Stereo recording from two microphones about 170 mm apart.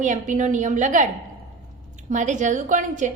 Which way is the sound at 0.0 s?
45° right (ahead or behind).